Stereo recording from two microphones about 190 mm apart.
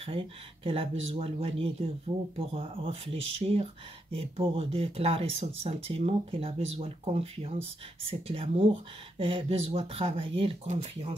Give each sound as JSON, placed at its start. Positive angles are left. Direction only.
{"t": 0.0, "sound": "speech", "side_deg": -30}